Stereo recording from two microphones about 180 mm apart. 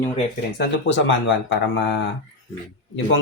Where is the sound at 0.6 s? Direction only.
90° left.